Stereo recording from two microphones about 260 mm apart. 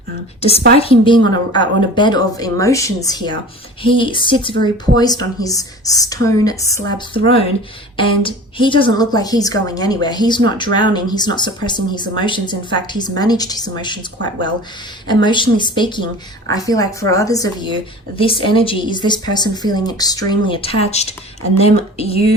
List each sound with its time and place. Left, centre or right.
0.8 s a woman's voice: centre
15.0 s a woman's voice: centre